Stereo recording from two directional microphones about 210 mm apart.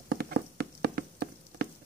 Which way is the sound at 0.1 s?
45° right (ahead or behind).